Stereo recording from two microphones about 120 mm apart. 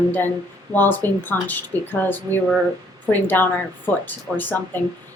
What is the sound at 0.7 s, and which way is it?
A woman's voice, 15° left (ahead or behind).